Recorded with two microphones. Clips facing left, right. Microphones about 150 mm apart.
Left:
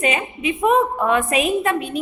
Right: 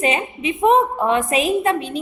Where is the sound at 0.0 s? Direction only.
30° right (ahead or behind).